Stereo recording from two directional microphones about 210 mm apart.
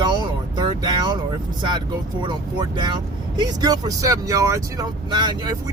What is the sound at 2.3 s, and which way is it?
Speech, 20° right (ahead or behind).